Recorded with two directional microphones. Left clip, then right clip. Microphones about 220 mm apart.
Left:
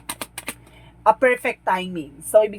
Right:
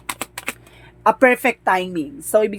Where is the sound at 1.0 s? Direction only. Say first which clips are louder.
Right 3 dB; 45° right (ahead or behind).